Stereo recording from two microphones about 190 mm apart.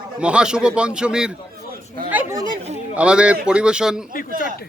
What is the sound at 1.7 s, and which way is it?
Chatter, 50° right (ahead or behind).